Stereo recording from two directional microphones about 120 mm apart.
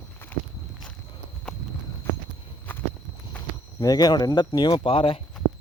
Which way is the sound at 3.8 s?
30° left (ahead or behind).